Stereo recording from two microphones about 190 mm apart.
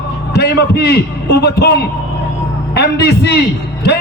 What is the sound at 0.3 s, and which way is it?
A man's voice, 60° left (ahead or behind).